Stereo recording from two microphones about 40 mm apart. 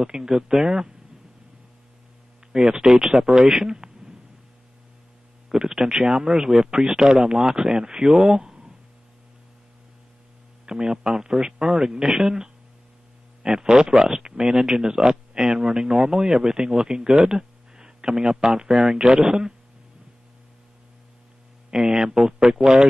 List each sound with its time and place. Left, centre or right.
0.0 s speech: centre
2.5 s speech: centre
5.5 s speech: centre
8.1 s speech: centre
8.4 s a sound: right
10.6 s speech: centre
13.4 s speech: centre
14.0 s speech: centre
21.6 s speech: centre